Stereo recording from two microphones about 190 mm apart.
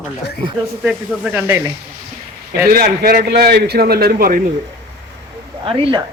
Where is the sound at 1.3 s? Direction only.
10° right (ahead or behind).